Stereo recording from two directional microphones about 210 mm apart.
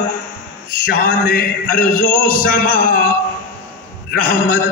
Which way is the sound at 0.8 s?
40° left (ahead or behind).